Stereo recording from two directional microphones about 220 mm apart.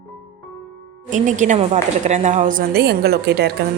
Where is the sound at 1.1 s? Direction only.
35° right (ahead or behind).